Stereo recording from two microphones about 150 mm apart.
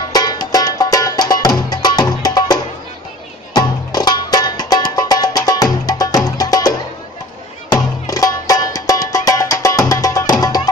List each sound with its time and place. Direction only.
0.1 s music: 25° left (ahead or behind)
7.7 s music: 25° left (ahead or behind)